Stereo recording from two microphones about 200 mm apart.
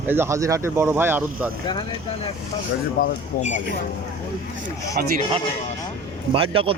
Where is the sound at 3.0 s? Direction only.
45° left (ahead or behind).